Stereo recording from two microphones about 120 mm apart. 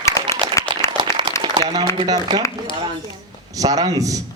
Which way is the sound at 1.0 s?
40° right (ahead or behind).